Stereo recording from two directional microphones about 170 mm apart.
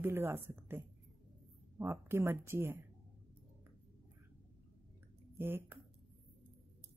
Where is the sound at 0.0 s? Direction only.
10° right (ahead or behind).